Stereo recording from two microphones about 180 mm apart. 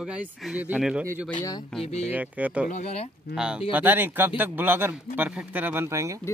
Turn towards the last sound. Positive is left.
turn(degrees=-15)  # may be behind; listen again after turning